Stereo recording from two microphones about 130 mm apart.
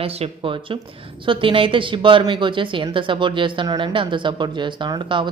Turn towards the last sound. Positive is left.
turn(degrees=-35)  # may be behind; listen again after turning